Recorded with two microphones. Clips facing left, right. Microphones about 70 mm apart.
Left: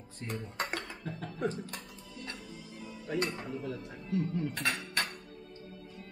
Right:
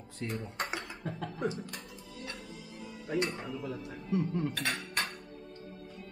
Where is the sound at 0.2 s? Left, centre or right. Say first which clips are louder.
Right 1 dB; centre.